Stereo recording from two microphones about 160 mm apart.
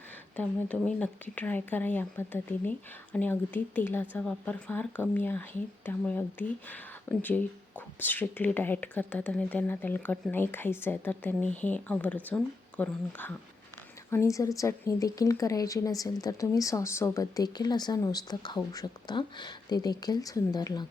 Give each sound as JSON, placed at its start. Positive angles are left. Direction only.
{"t": 0.3, "sound": "a woman's voice", "side_deg": 5}